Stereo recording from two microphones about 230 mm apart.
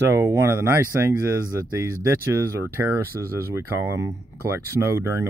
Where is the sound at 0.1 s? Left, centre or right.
Centre.